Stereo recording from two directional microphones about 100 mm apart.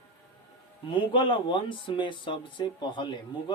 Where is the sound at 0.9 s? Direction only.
60° left (ahead or behind).